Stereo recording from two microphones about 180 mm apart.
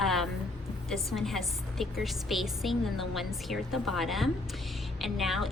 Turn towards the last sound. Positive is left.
turn(degrees=0)  # may be behind; listen again after turning